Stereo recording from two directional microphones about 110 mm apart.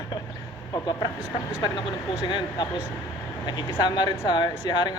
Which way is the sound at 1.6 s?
45° left (ahead or behind).